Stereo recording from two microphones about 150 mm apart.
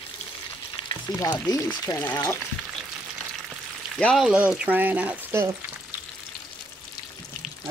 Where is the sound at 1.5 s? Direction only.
20° left (ahead or behind).